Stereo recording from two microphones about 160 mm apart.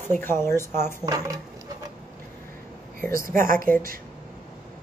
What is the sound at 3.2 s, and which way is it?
Speech, 60° right (ahead or behind).